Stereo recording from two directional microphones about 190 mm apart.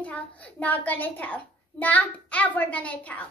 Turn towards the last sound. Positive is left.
turn(degrees=10)  # may be behind; listen again after turning